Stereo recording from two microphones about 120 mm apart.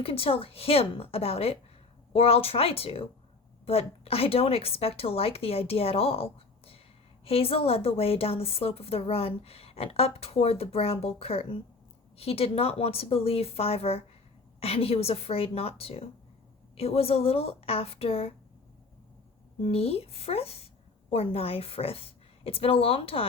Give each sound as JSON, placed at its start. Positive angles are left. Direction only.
{"t": 0.0, "sound": "a woman's voice", "side_deg": 50}
{"t": 7.3, "sound": "a woman's voice", "side_deg": 55}
{"t": 19.6, "sound": "a woman's voice", "side_deg": 55}